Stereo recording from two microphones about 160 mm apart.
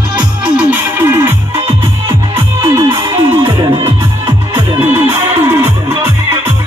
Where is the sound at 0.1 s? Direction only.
10° right (ahead or behind).